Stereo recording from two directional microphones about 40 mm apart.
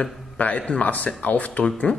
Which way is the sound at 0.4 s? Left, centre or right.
Left.